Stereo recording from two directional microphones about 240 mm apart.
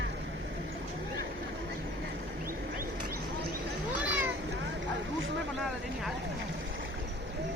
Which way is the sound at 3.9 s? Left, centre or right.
Centre.